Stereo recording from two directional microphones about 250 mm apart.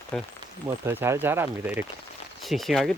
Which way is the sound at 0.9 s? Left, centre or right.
Centre.